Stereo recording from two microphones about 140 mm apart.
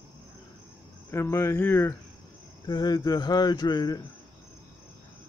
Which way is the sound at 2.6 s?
30° left (ahead or behind).